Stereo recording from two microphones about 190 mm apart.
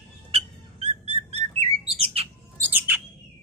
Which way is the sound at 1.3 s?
35° right (ahead or behind).